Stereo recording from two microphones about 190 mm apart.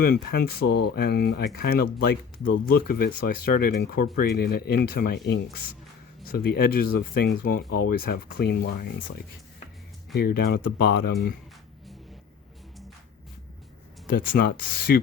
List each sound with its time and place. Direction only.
0.0 s speech: 55° left (ahead or behind)
10.2 s speech: 55° left (ahead or behind)
14.1 s speech: 50° left (ahead or behind)